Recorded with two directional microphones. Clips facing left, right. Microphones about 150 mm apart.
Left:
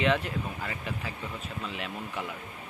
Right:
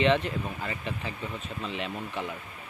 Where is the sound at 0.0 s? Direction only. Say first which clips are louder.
Right 3 dB; 5° left (ahead or behind).